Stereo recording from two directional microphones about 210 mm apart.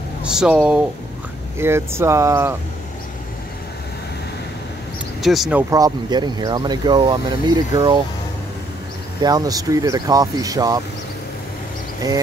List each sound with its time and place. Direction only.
0.2 s speech: 5° right (ahead or behind)
5.2 s speech: centre (ahead or behind); by 8.0 s 20° right (ahead or behind)
9.2 s speech: 15° right (ahead or behind)